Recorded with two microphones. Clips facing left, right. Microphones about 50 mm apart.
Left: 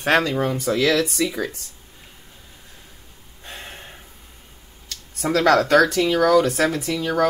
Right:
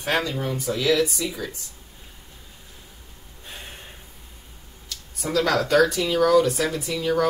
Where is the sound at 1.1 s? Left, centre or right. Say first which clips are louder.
Left 6 dB; left.